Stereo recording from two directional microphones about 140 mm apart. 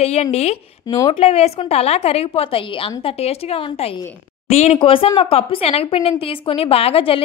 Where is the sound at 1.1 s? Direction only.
45° left (ahead or behind).